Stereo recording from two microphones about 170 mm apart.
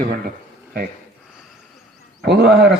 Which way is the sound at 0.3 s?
55° right (ahead or behind).